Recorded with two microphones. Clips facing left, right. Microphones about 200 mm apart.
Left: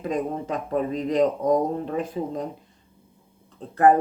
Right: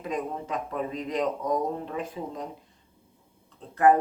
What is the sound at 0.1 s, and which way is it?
Speech, 40° left (ahead or behind).